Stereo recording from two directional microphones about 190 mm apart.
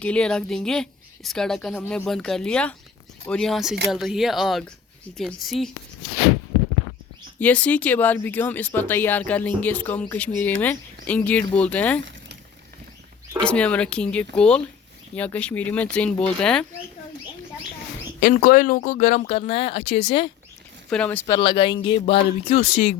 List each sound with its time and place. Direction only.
0.0 s a woman's voice: 5° left (ahead or behind)
7.3 s speech: 5° left (ahead or behind)
13.4 s a woman's voice: 5° left (ahead or behind)
18.2 s speech: 50° left (ahead or behind); by 20.3 s 30° left (ahead or behind)
20.9 s speech: 5° left (ahead or behind)
21.2 s speech: 25° left (ahead or behind)